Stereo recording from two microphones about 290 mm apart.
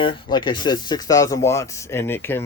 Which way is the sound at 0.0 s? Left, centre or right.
Centre.